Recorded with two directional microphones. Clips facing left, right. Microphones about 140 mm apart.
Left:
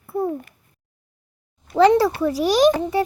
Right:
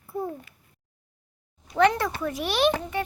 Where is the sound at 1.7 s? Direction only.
30° left (ahead or behind).